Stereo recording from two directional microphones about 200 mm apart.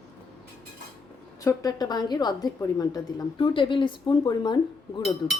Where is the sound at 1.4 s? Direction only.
15° left (ahead or behind).